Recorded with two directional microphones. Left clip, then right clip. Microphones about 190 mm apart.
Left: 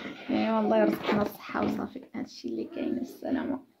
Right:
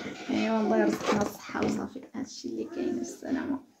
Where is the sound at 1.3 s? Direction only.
50° left (ahead or behind).